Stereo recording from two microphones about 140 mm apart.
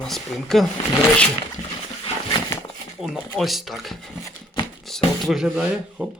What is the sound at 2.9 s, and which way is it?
Speech, 5° right (ahead or behind).